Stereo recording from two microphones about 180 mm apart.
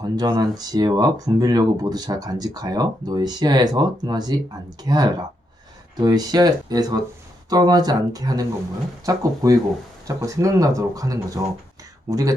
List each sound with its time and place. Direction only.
0.0 s speech: 20° right (ahead or behind)